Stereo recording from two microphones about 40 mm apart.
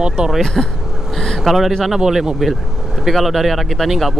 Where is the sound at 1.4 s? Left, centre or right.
Centre.